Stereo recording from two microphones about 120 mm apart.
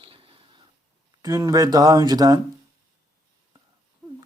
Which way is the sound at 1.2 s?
25° right (ahead or behind).